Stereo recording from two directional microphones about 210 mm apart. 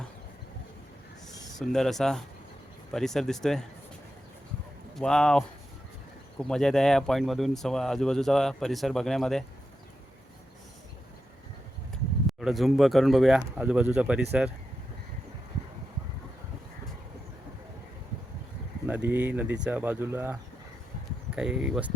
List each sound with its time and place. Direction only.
1.5 s speech: centre (ahead or behind)
4.9 s speech: 5° left (ahead or behind)
6.5 s speech: centre (ahead or behind)
12.4 s speech: centre (ahead or behind)
18.9 s speech: 10° right (ahead or behind)